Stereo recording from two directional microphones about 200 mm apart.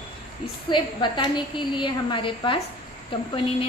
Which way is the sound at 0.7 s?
25° left (ahead or behind).